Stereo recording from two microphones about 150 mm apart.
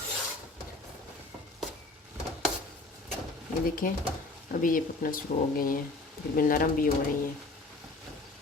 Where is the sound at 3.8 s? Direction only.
60° left (ahead or behind).